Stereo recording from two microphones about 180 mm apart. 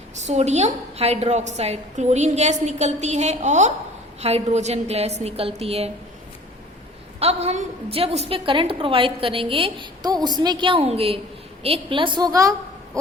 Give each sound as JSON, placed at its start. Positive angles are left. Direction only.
{"t": 0.2, "sound": "a woman's voice", "side_deg": -40}
{"t": 7.2, "sound": "a woman's voice", "side_deg": -35}